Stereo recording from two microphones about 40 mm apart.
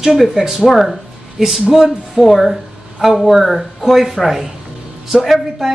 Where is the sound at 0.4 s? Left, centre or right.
Centre.